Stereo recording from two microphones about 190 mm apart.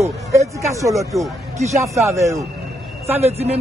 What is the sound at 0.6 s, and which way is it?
Speech, 15° right (ahead or behind).